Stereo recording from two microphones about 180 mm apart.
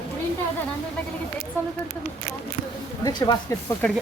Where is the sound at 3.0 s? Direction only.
20° left (ahead or behind).